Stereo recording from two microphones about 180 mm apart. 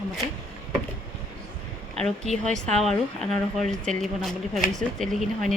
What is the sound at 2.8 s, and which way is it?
Speech, 5° left (ahead or behind).